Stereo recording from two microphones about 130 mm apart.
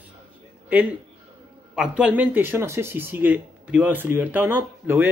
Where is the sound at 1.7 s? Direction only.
5° right (ahead or behind).